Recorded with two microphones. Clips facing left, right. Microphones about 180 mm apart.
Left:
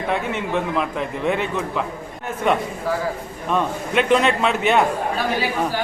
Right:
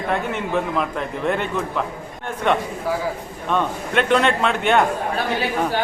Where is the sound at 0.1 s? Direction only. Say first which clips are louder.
Right 1 dB; centre (ahead or behind).